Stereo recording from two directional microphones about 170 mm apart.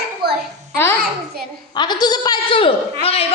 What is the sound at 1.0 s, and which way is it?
Speech, 65° right (ahead or behind).